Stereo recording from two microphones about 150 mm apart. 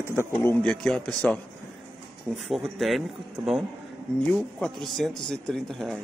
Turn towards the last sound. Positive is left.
turn(degrees=5)  # may be behind; listen again after turning